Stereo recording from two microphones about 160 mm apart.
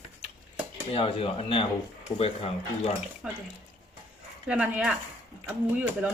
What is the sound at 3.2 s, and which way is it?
Speech, 5° right (ahead or behind).